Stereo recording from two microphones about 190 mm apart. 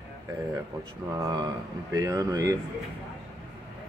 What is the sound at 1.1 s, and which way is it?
Speech, 20° right (ahead or behind).